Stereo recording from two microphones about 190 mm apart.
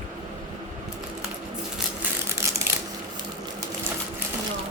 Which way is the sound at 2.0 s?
15° right (ahead or behind).